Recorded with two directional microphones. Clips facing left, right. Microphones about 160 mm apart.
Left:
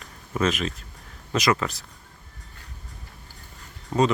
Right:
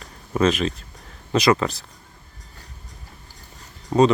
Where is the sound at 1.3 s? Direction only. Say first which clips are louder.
Right 5 dB; 30° right (ahead or behind).